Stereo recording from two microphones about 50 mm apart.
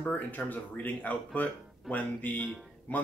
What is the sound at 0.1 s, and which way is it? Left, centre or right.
Speech, left.